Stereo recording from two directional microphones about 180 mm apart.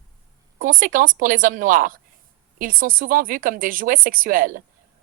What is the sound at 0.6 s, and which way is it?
Speech, 50° right (ahead or behind).